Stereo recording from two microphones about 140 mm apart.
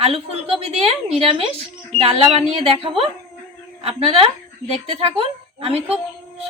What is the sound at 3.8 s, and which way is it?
A woman's voice, 45° right (ahead or behind).